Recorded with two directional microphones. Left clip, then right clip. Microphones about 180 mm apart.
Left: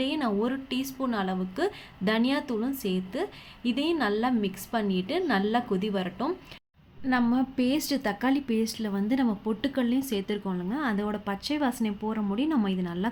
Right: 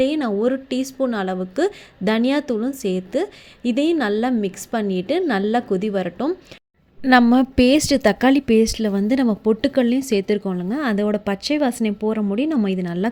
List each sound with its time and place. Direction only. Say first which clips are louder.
0.0 s a woman's voice: right 9 dB; 35° right (ahead or behind)
7.0 s a woman's voice: right 12 dB; 60° right (ahead or behind)